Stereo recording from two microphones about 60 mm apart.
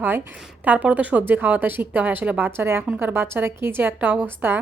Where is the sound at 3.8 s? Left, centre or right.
Right.